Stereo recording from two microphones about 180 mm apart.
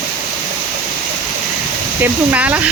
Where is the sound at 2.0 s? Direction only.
10° right (ahead or behind).